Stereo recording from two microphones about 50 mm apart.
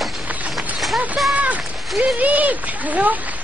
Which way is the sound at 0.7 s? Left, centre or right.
Centre.